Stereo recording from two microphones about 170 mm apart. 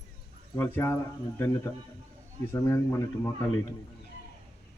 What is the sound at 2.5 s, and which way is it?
Speech, 15° left (ahead or behind).